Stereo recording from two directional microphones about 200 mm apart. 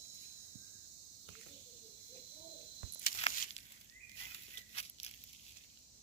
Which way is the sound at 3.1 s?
30° left (ahead or behind).